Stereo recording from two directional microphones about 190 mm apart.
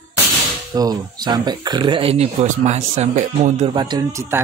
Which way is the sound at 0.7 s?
20° right (ahead or behind).